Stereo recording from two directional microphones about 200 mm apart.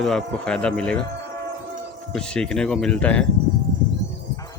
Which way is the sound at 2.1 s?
5° left (ahead or behind).